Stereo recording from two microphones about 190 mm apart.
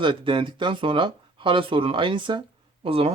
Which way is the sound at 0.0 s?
25° right (ahead or behind).